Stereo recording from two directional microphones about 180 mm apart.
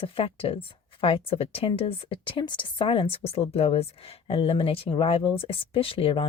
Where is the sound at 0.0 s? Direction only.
30° left (ahead or behind).